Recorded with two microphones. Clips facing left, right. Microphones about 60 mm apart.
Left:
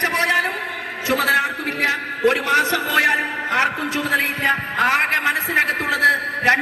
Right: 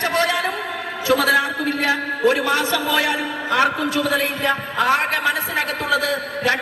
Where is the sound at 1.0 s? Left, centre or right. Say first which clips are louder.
Right 1 dB; left.